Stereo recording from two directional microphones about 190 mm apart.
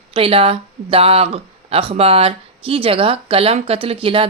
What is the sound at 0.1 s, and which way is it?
A woman's voice, 30° right (ahead or behind).